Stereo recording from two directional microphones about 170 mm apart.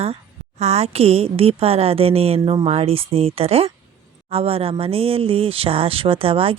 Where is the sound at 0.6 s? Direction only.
40° right (ahead or behind).